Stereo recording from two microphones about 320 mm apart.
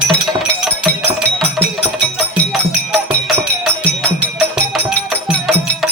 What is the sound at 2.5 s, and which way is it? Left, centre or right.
Music, centre.